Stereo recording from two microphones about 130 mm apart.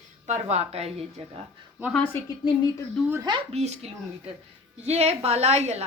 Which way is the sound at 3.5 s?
55° right (ahead or behind).